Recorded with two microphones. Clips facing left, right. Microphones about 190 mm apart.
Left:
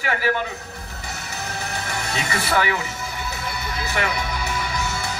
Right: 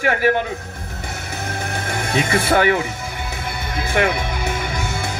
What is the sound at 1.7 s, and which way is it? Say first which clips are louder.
Music: right 8 dB; 50° right (ahead or behind).